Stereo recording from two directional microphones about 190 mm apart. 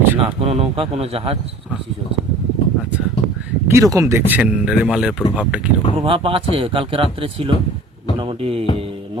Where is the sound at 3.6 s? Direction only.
15° right (ahead or behind).